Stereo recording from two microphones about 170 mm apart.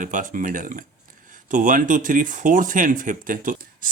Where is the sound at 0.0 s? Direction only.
50° right (ahead or behind).